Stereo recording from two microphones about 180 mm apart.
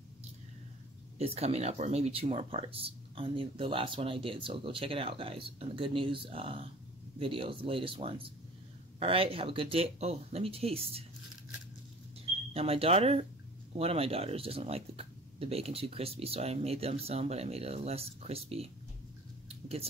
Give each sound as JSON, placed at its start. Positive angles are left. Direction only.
{"t": 1.1, "sound": "speech", "side_deg": -35}
{"t": 12.5, "sound": "speech", "side_deg": -35}